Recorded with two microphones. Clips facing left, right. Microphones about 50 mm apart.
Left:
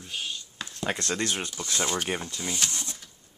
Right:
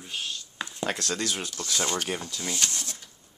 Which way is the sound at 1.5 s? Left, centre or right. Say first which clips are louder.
Right 1 dB; centre.